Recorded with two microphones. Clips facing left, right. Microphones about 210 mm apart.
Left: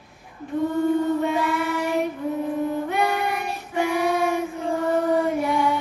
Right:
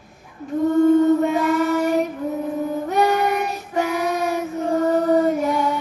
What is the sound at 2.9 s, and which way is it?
Child singing, 40° right (ahead or behind).